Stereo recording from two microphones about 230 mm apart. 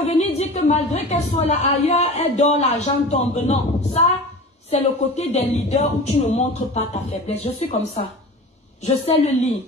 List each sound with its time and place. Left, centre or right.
0.2 s a woman's voice: left